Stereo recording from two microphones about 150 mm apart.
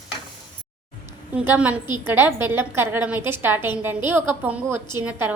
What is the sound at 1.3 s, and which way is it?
A woman's voice, 10° right (ahead or behind).